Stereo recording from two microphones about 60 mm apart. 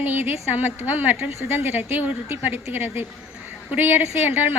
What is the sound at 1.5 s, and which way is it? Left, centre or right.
A woman's voice, right.